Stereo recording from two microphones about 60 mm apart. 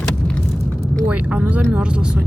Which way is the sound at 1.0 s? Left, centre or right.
Right.